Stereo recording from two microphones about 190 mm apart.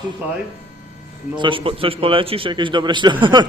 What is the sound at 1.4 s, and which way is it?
A man's voice, 25° right (ahead or behind).